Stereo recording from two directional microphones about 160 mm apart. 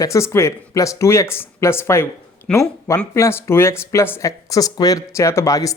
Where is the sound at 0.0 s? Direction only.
20° left (ahead or behind).